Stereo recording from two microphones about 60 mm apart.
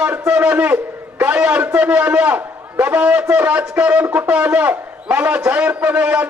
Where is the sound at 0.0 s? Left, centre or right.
Right.